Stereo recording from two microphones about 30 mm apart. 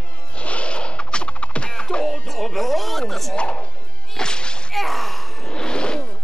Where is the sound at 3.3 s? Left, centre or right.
Left.